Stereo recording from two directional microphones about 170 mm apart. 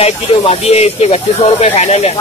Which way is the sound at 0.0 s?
35° left (ahead or behind).